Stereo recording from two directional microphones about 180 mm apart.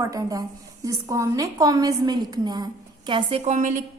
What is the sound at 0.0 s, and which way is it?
A woman's voice, 20° right (ahead or behind).